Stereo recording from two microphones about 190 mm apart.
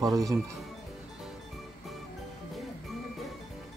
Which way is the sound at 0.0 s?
20° right (ahead or behind).